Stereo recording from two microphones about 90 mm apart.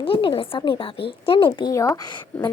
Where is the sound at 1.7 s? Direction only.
35° left (ahead or behind).